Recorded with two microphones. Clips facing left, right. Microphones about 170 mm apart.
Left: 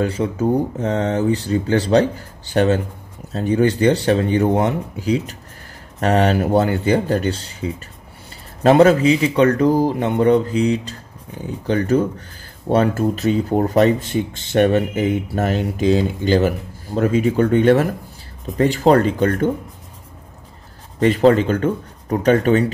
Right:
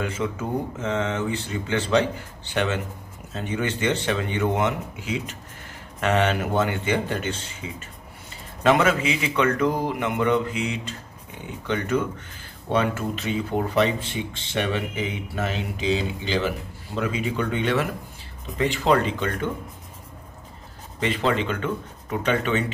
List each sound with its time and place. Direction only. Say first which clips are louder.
0.0 s speech: left 8 dB; 35° left (ahead or behind)
21.0 s speech: left 10 dB; 40° left (ahead or behind)